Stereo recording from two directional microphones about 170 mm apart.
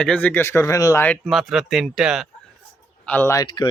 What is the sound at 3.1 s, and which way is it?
Speech, 15° left (ahead or behind).